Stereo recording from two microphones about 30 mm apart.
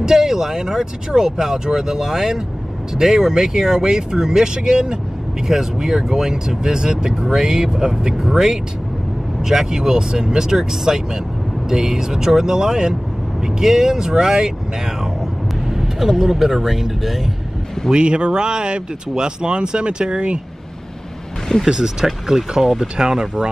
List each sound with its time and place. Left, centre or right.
0.0 s speech: centre
7.2 s speech: centre
9.4 s speech: centre
15.6 s speech: centre
17.9 s speech: right
21.6 s speech: centre